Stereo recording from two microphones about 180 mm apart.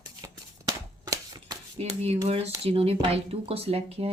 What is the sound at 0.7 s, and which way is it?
Shuffling cards, 20° right (ahead or behind).